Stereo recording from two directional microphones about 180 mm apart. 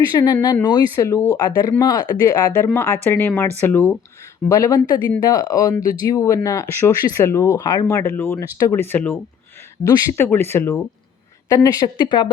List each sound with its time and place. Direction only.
0.1 s a woman's voice: 20° left (ahead or behind)